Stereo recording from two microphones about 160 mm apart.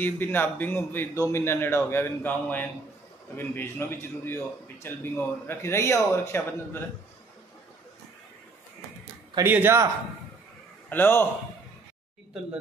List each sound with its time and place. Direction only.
0.0 s a man's voice: 15° left (ahead or behind)
9.4 s speech: 15° right (ahead or behind)
10.9 s a man's voice: 15° left (ahead or behind)